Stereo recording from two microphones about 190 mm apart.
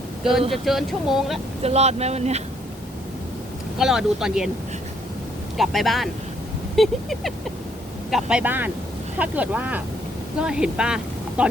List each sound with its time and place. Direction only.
0.5 s speech: centre (ahead or behind)
1.6 s speech: 35° right (ahead or behind)
3.8 s speech: centre (ahead or behind)
5.5 s speech: centre (ahead or behind)